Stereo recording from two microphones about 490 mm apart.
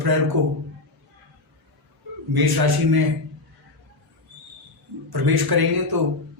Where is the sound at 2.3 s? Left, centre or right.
Right.